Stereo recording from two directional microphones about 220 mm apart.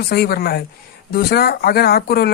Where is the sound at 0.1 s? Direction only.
45° left (ahead or behind).